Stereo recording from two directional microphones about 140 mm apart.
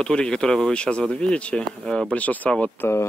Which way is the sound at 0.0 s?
5° left (ahead or behind).